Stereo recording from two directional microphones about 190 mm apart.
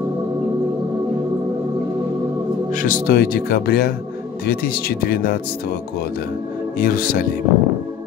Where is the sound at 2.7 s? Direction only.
45° left (ahead or behind).